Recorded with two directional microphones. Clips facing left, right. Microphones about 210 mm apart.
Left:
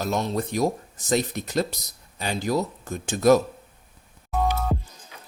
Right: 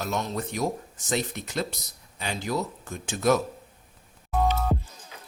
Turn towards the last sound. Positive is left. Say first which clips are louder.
# even
turn(degrees=0)  # may be behind; listen again after turning